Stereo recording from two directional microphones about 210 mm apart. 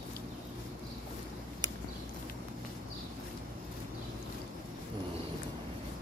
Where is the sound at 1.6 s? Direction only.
20° right (ahead or behind).